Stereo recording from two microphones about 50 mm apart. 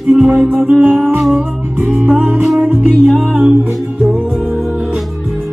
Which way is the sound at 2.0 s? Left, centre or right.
Right.